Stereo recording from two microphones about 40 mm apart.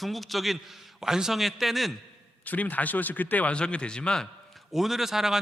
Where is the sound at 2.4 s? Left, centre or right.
Left.